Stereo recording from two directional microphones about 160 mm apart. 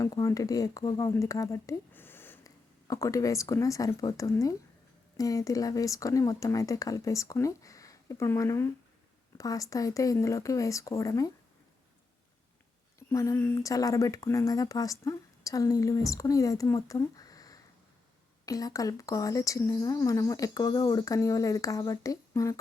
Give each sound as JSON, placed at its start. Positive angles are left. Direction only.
{"t": 0.0, "sound": "speech", "side_deg": 20}
{"t": 13.0, "sound": "speech", "side_deg": 20}